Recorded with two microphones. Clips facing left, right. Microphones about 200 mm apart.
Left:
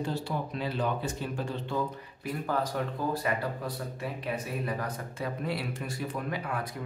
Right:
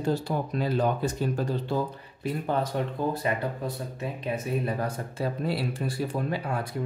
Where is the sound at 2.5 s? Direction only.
25° right (ahead or behind).